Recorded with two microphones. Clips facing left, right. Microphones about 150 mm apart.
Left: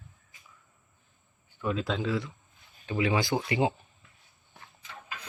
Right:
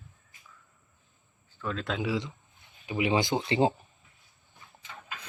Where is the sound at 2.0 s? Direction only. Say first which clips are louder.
Even; 15° right (ahead or behind).